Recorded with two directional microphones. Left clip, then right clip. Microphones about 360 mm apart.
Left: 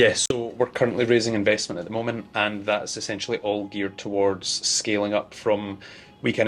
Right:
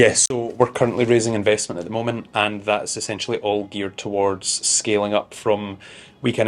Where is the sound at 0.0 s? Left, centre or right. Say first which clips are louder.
Right 3 dB; right.